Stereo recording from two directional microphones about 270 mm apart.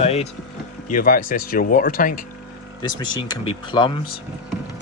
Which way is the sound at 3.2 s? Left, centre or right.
Centre.